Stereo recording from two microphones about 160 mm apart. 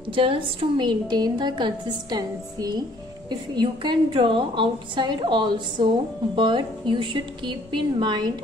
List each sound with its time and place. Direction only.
0.1 s a woman's voice: 35° right (ahead or behind)